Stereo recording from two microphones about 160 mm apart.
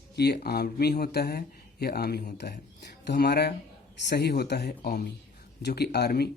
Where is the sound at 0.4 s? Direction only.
85° left.